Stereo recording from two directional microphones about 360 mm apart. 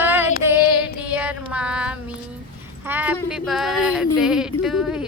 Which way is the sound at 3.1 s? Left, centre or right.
Centre.